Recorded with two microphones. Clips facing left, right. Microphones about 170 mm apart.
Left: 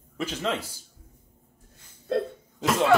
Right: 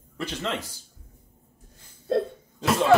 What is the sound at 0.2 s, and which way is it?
Speech, 10° left (ahead or behind).